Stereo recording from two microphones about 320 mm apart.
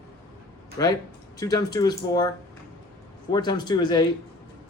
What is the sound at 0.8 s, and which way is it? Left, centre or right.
Speech, centre.